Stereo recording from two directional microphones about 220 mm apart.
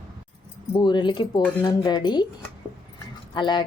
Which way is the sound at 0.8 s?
20° left (ahead or behind).